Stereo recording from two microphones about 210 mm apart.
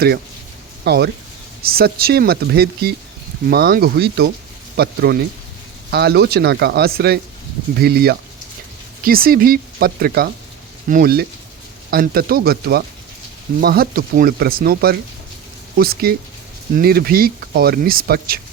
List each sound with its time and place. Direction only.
0.9 s speech: 50° right (ahead or behind)